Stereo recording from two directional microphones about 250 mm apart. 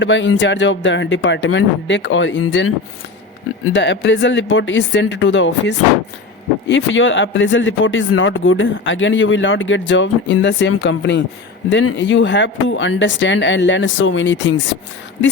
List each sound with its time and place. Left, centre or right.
0.0 s speech: left